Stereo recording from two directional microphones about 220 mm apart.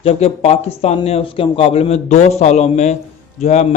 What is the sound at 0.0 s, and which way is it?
Speech, 25° left (ahead or behind).